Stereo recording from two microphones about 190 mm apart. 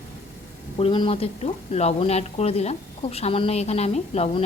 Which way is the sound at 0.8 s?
25° left (ahead or behind).